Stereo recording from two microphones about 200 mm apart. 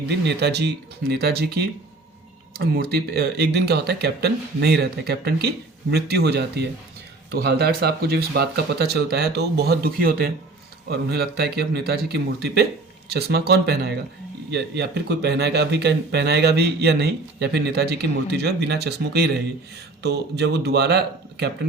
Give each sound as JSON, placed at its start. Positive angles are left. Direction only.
{"t": 0.1, "sound": "speech", "side_deg": -55}